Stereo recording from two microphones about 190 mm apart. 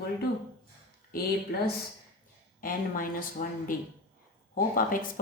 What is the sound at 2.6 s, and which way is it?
Speech, 45° left (ahead or behind).